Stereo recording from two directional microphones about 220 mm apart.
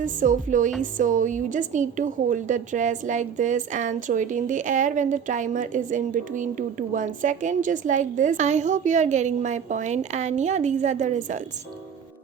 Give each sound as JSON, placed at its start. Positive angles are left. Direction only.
{"t": 0.0, "sound": "a woman's voice", "side_deg": -35}